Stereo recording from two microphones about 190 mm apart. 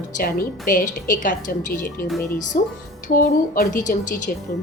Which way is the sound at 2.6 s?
50° left (ahead or behind).